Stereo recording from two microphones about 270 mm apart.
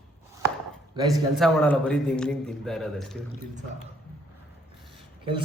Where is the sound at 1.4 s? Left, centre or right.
Centre.